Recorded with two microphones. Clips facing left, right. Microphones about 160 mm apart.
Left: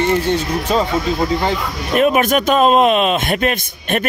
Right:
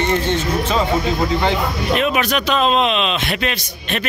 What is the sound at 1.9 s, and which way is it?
A man's voice, 45° left (ahead or behind).